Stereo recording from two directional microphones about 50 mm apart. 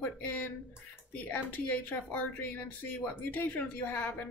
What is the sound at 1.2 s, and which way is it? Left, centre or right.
Speech, left.